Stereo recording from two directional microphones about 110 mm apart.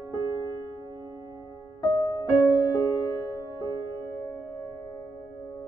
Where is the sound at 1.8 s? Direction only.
40° left (ahead or behind).